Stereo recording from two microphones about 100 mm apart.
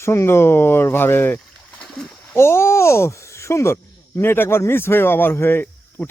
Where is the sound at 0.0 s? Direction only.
25° left (ahead or behind).